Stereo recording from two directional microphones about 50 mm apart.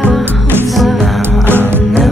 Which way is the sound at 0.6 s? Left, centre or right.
Centre.